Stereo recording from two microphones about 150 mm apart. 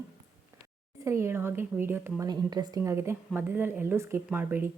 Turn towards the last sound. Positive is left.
turn(degrees=-15)  # may be behind; listen again after turning